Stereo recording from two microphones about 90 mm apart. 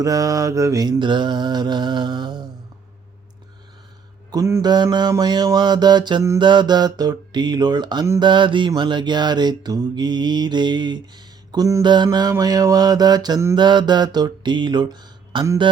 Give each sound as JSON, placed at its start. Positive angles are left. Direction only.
{"t": 0.0, "sound": "mantra", "side_deg": -40}
{"t": 0.9, "sound": "mantra", "side_deg": -60}
{"t": 4.3, "sound": "mantra", "side_deg": -35}
{"t": 4.6, "sound": "mantra", "side_deg": -50}
{"t": 12.0, "sound": "mantra", "side_deg": -45}